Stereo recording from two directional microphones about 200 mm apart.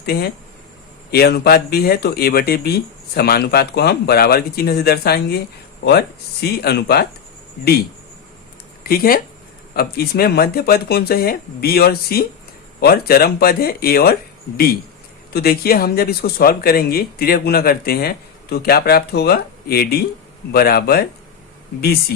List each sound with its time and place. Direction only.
0.0 s speech: 50° left (ahead or behind)
8.8 s speech: 45° left (ahead or behind)